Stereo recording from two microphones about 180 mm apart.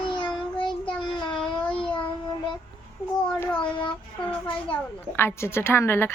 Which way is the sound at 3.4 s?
5° left (ahead or behind).